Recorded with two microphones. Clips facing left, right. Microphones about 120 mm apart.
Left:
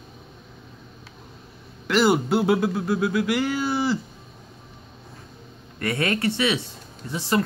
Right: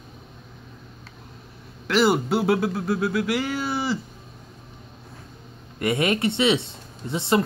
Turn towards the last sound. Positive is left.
turn(degrees=-20)  # may be behind; listen again after turning